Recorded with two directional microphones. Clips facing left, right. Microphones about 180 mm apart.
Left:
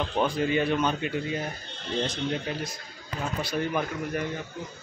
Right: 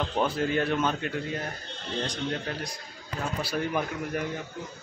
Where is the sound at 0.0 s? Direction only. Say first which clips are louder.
Left 1 dB; centre (ahead or behind).